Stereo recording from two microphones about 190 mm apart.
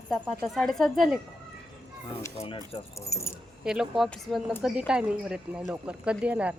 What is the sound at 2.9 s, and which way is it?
Speech, 15° left (ahead or behind).